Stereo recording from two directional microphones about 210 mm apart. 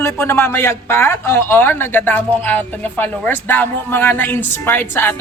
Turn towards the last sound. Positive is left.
turn(degrees=10)  # may be behind; listen again after turning